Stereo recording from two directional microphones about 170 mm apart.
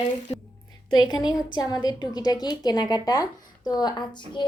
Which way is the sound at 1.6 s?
25° left (ahead or behind).